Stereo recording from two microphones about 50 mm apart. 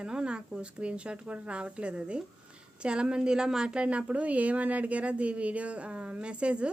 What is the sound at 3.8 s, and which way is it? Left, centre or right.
Speech, right.